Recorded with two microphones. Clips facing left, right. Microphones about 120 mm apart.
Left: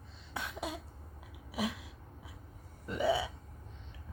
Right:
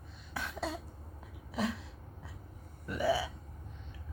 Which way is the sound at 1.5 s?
10° left (ahead or behind).